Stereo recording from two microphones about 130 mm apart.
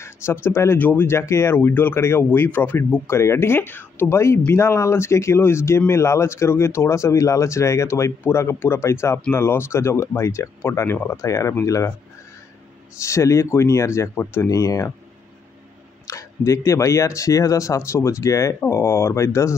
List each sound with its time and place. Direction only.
0.0 s speech: 20° left (ahead or behind)
13.0 s speech: 20° left (ahead or behind)
16.1 s speech: 25° left (ahead or behind)